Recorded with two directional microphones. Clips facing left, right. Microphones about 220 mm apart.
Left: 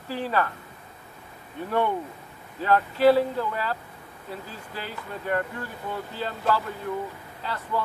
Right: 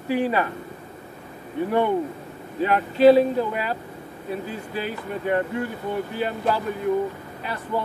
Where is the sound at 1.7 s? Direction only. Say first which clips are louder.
Right 4 dB; 15° right (ahead or behind).